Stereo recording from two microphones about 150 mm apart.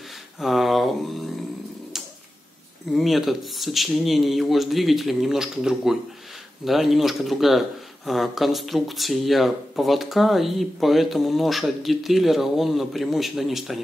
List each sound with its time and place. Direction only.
0.4 s speech: centre (ahead or behind)
2.9 s speech: centre (ahead or behind)